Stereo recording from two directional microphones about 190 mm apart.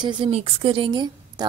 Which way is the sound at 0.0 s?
30° right (ahead or behind).